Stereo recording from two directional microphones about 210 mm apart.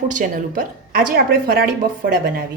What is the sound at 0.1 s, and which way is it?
A woman's voice, 40° right (ahead or behind).